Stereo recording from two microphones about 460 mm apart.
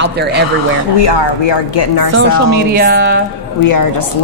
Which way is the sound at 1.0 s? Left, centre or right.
Left.